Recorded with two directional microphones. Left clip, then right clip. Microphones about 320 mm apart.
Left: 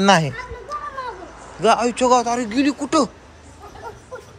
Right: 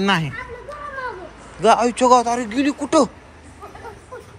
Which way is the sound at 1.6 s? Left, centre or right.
Centre.